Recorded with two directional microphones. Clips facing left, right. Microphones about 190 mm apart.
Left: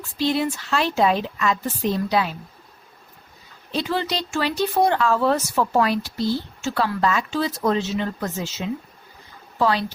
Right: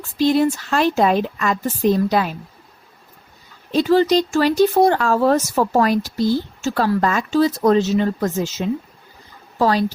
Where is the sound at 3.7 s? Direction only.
40° right (ahead or behind).